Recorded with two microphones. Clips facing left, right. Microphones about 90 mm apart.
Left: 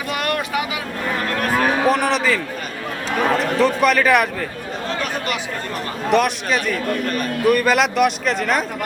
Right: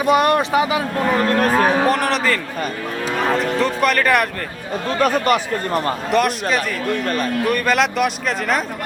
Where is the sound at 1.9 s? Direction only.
Centre (ahead or behind).